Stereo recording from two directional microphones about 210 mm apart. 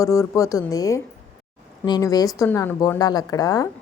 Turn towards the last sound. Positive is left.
turn(degrees=15)  # may be behind; listen again after turning